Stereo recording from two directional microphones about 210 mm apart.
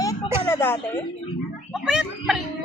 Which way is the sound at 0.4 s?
10° left (ahead or behind).